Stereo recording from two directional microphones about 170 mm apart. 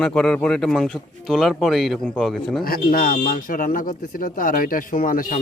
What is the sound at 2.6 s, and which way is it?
Speech, 60° left (ahead or behind).